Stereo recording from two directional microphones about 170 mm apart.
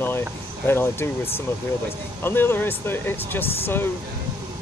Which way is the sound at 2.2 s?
15° left (ahead or behind).